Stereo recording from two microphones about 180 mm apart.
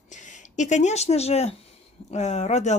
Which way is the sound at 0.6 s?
40° left (ahead or behind).